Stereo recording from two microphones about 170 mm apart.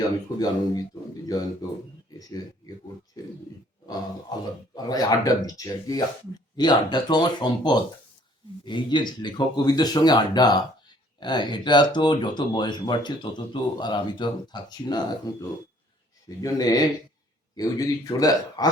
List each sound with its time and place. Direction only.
1.3 s speech: 20° left (ahead or behind)